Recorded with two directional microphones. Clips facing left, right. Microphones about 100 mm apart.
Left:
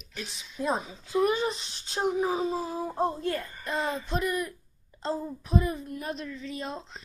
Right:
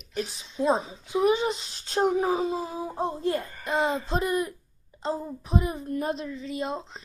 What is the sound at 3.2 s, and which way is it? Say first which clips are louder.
A woman's voice: right 4 dB; 25° right (ahead or behind).